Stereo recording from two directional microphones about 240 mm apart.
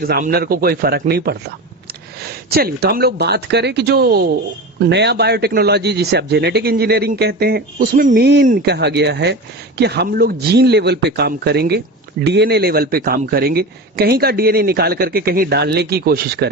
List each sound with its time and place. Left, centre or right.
0.0 s a man's voice: right